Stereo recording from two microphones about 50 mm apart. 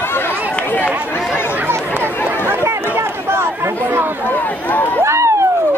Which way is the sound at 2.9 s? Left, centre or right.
Right.